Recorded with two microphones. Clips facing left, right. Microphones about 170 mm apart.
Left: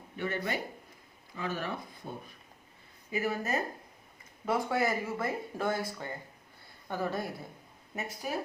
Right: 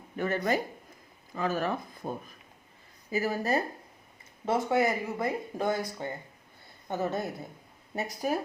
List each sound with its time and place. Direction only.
0.2 s speech: 40° right (ahead or behind)
4.4 s speech: 20° right (ahead or behind)
7.9 s speech: 40° right (ahead or behind)